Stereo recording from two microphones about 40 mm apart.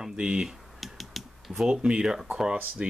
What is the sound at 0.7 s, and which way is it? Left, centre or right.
Typing, centre.